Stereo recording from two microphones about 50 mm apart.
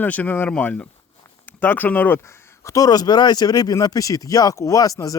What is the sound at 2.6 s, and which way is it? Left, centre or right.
Speech, left.